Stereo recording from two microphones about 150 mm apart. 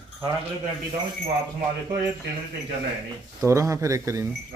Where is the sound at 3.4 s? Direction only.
20° right (ahead or behind).